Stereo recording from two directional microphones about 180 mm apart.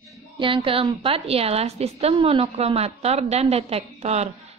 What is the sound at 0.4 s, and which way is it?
A woman's voice, 30° right (ahead or behind).